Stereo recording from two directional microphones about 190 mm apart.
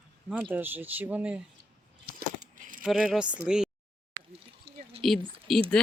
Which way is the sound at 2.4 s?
45° right (ahead or behind).